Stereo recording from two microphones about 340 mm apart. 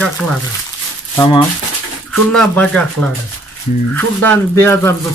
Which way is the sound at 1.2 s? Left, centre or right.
Centre.